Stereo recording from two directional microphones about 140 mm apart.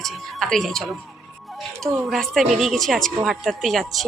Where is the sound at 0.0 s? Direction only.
Centre (ahead or behind).